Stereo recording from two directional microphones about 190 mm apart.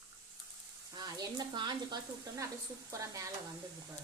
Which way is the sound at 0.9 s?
20° right (ahead or behind).